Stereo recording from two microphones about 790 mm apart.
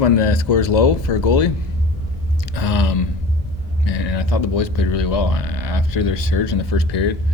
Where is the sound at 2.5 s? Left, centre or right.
Left.